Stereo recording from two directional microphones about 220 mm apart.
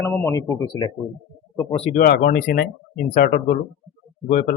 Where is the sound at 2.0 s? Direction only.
45° left (ahead or behind).